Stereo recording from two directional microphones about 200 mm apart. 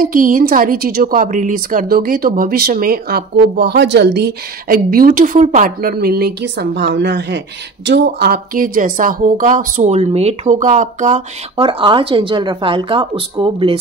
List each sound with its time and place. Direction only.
0.0 s a woman's voice: 45° right (ahead or behind); by 13.7 s 25° right (ahead or behind)